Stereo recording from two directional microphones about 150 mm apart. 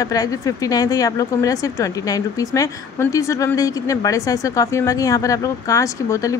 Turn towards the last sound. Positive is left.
turn(degrees=20)  # may be behind; listen again after turning